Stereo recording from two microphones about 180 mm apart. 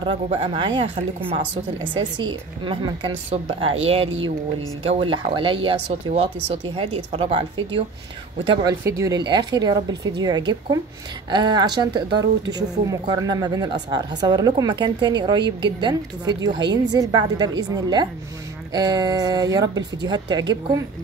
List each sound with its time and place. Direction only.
0.0 s speech: 30° right (ahead or behind)
8.6 s speech: 15° right (ahead or behind)